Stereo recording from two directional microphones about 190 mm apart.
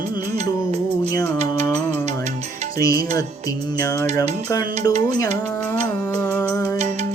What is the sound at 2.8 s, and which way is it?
Music, 20° left (ahead or behind).